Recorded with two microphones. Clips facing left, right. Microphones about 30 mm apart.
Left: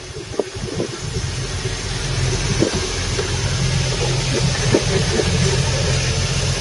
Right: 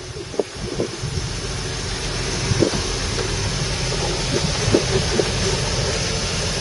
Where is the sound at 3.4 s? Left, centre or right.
Left.